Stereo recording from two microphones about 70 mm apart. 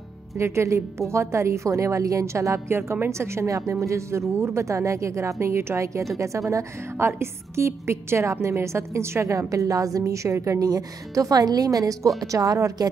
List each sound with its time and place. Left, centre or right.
0.4 s a woman's voice: right